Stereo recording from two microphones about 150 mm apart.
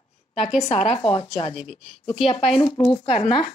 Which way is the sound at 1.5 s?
5° right (ahead or behind).